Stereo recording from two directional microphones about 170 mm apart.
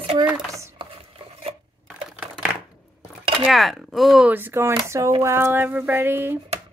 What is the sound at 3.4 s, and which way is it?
Speech, centre (ahead or behind).